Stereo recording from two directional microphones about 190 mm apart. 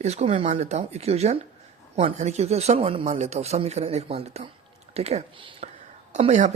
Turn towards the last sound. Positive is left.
turn(degrees=-35)  # may be behind; listen again after turning